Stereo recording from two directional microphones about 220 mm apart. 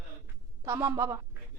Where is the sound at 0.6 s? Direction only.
10° right (ahead or behind).